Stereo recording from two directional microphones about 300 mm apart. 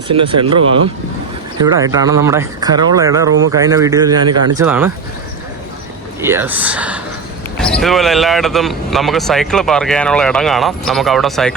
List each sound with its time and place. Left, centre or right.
0.1 s speech: centre
1.6 s speech: centre
6.2 s speech: centre